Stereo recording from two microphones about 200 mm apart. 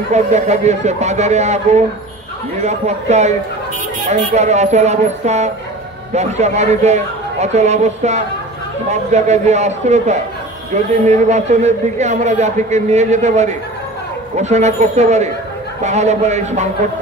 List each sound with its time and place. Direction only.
0.1 s a man's voice: 35° right (ahead or behind)